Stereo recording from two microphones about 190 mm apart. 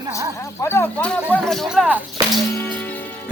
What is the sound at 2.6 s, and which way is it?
Music, 10° left (ahead or behind).